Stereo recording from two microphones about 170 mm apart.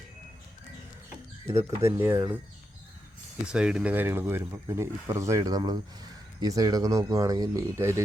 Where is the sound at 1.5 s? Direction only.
40° right (ahead or behind).